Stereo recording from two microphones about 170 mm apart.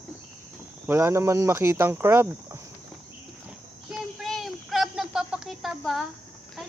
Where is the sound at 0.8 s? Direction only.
15° right (ahead or behind).